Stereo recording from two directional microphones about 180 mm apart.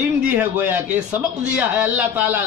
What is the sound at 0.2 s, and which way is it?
A man's voice, 10° right (ahead or behind).